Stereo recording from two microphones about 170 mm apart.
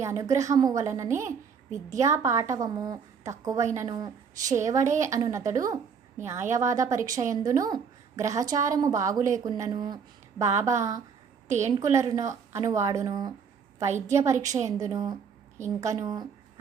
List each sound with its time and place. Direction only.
0.0 s a woman's voice: 20° right (ahead or behind)